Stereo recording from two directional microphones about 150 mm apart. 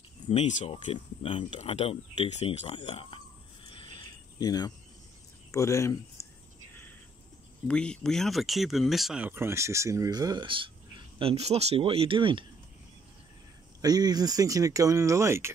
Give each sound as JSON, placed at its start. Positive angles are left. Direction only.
{"t": 0.3, "sound": "speech", "side_deg": 50}
{"t": 1.2, "sound": "speech", "side_deg": 35}
{"t": 1.6, "sound": "speech", "side_deg": 45}
{"t": 3.6, "sound": "cricket", "side_deg": 35}
{"t": 5.5, "sound": "speech", "side_deg": 20}
{"t": 7.6, "sound": "speech", "side_deg": 5}
{"t": 13.7, "sound": "speech", "side_deg": -25}